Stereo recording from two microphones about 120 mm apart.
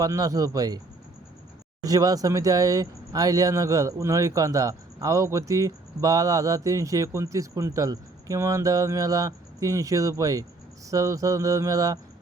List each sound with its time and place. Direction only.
0.0 s speech: 30° right (ahead or behind)
1.8 s speech: 30° right (ahead or behind)